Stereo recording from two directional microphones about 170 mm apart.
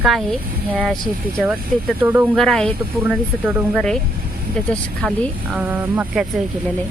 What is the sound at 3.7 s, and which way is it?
Speech, 5° left (ahead or behind).